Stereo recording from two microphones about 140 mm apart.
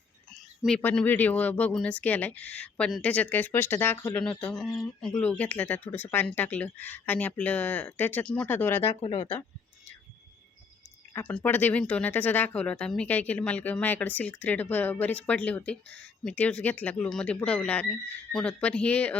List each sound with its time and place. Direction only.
0.8 s speech: 15° left (ahead or behind)
9.0 s speech: 40° left (ahead or behind)
11.1 s speech: 10° left (ahead or behind)